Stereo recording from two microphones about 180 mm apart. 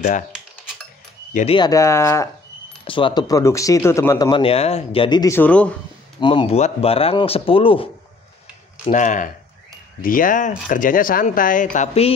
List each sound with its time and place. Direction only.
1.3 s speech: 35° left (ahead or behind)
1.6 s speech: 20° left (ahead or behind)
2.9 s speech: 30° left (ahead or behind)
5.4 s speech: 5° left (ahead or behind)
6.1 s speech: 30° left (ahead or behind)
8.9 s speech: 45° left (ahead or behind)